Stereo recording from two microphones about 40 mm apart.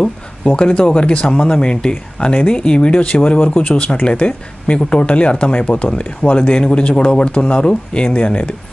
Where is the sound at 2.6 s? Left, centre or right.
Left.